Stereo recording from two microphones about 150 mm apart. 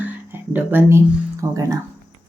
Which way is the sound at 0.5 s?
15° right (ahead or behind).